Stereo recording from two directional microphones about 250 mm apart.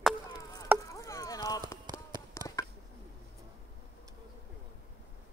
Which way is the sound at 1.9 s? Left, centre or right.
Centre.